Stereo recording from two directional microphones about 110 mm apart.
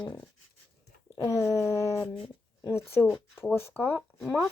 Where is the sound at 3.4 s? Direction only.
20° left (ahead or behind).